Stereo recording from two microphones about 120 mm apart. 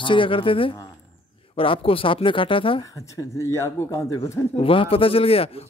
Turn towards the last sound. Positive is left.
turn(degrees=55)  # may be behind; listen again after turning